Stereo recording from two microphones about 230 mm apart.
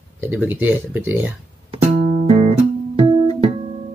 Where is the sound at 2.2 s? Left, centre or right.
Right.